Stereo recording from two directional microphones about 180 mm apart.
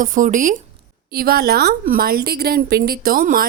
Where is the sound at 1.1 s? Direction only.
60° right (ahead or behind).